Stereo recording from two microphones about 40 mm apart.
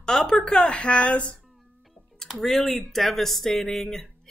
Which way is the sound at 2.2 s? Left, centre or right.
Centre.